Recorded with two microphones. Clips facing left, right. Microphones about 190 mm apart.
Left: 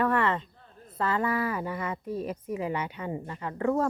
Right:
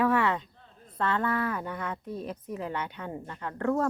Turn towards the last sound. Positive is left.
turn(degrees=5)  # may be behind; listen again after turning